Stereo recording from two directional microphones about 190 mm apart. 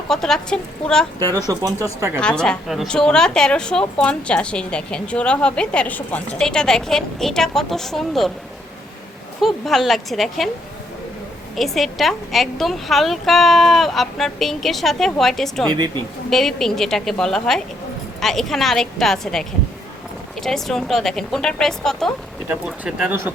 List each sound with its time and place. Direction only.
0.1 s a woman's voice: 5° left (ahead or behind)
1.5 s speech: 15° right (ahead or behind)
2.1 s a woman's voice: 5° left (ahead or behind)
9.4 s a woman's voice: centre (ahead or behind)
11.5 s a woman's voice: centre (ahead or behind)